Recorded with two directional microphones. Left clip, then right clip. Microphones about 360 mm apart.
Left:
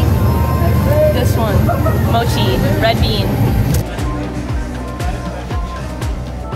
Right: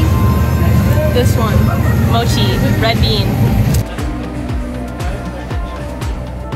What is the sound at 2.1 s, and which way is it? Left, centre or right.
Speech, centre.